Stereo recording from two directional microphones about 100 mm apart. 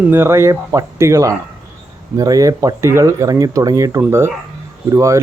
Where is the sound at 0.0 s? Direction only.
20° right (ahead or behind).